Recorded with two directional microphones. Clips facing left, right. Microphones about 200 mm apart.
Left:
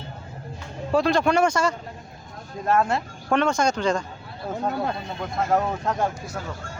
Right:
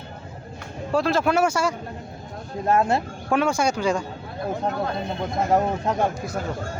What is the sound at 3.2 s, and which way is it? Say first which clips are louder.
Speech: even; 10° right (ahead or behind).